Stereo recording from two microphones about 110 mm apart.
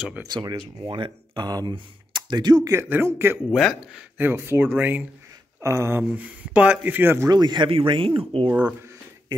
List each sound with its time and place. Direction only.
0.0 s speech: 10° right (ahead or behind)
0.3 s speech: 40° right (ahead or behind)
2.7 s speech: 25° right (ahead or behind)
3.4 s speech: centre (ahead or behind)
4.2 s speech: 20° right (ahead or behind)
5.6 s speech: 25° right (ahead or behind)
7.2 s speech: 40° right (ahead or behind); by 8.5 s 60° right (ahead or behind)
8.5 s speech: 10° right (ahead or behind)